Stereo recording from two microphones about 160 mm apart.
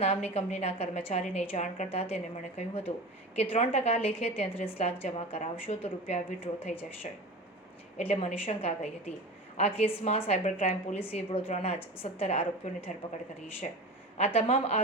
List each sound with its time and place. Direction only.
0.0 s a woman's voice: 40° left (ahead or behind)
7.9 s a woman's voice: 40° left (ahead or behind)
14.3 s a woman's voice: 40° left (ahead or behind)